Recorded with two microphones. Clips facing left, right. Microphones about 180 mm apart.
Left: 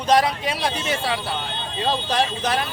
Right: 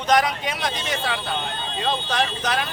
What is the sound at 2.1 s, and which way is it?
Speech, 30° left (ahead or behind).